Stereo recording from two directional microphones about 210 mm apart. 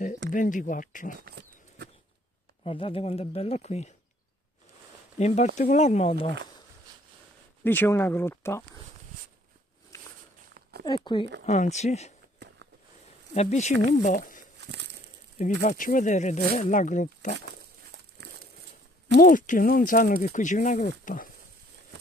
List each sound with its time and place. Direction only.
0.3 s speech: 40° left (ahead or behind)
1.2 s a sound: 50° right (ahead or behind)
2.6 s speech: 25° left (ahead or behind)
5.2 s speech: 30° left (ahead or behind)
7.6 s speech: 10° left (ahead or behind)
10.9 s speech: 20° left (ahead or behind)
11.4 s speech: 35° left (ahead or behind)
13.3 s speech: 30° left (ahead or behind)
18.2 s a sound: 55° right (ahead or behind)
19.1 s speech: 40° left (ahead or behind)